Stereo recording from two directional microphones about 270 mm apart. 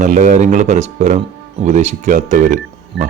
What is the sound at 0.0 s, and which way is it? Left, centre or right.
Speech, right.